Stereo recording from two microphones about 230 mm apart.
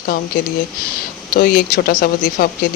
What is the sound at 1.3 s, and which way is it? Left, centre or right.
Speech, left.